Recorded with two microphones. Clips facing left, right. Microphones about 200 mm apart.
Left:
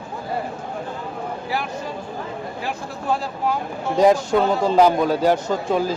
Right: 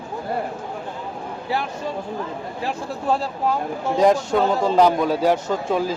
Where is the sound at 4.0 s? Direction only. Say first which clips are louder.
Left 2 dB; centre (ahead or behind).